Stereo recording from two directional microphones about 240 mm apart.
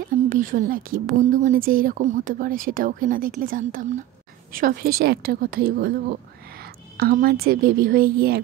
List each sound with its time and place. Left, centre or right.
0.3 s speech: right